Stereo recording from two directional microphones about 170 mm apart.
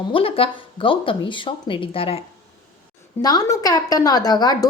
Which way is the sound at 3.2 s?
20° left (ahead or behind).